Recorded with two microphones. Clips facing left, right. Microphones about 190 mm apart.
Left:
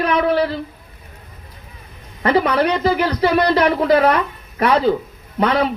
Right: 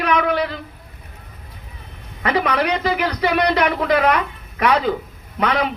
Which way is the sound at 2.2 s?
30° left (ahead or behind).